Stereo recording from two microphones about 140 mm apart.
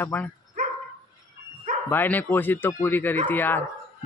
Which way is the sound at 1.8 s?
15° left (ahead or behind).